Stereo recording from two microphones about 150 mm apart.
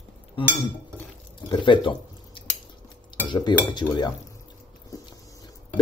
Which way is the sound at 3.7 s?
30° left (ahead or behind).